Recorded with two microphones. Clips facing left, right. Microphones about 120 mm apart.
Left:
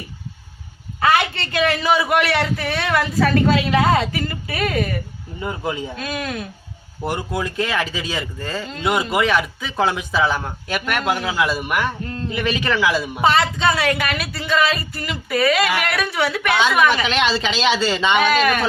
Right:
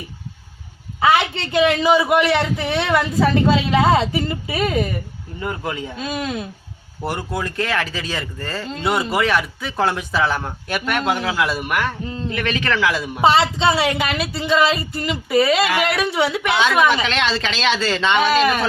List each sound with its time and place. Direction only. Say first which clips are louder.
1.0 s speech: right 1 dB; 20° right (ahead or behind)
5.4 s speech: left 1 dB; 10° left (ahead or behind)
6.0 s speech: right 2 dB; 25° right (ahead or behind)
7.0 s speech: left 1 dB; centre (ahead or behind)
13.2 s speech: right 2 dB; 25° right (ahead or behind)
16.6 s speech: right 1 dB; centre (ahead or behind)